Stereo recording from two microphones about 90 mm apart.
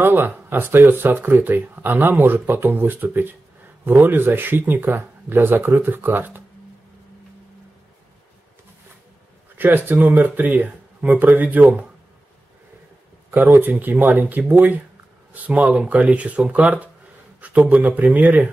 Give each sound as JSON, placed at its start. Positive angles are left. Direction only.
{"t": 0.0, "sound": "speech", "side_deg": -25}
{"t": 9.6, "sound": "speech", "side_deg": -20}
{"t": 13.3, "sound": "speech", "side_deg": -20}